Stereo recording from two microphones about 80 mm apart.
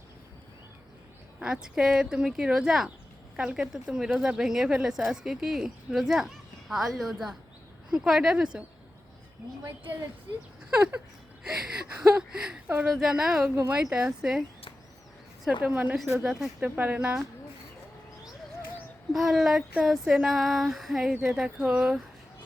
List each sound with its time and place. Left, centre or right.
1.4 s speech: centre
11.4 s speech: centre
15.6 s a woman's voice: centre
16.1 s speech: centre
16.6 s speech: right
19.1 s speech: centre